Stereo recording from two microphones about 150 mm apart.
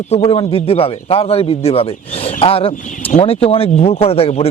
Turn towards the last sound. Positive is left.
turn(degrees=40)  # may be behind; listen again after turning